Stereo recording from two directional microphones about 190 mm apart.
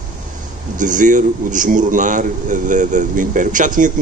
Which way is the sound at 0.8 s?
40° right (ahead or behind).